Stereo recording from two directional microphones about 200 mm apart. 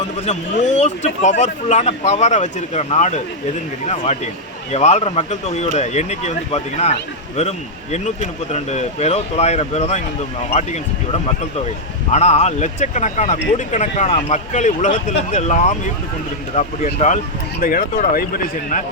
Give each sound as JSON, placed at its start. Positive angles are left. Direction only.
{"t": 0.8, "sound": "speech", "side_deg": 35}
{"t": 17.6, "sound": "speech", "side_deg": 45}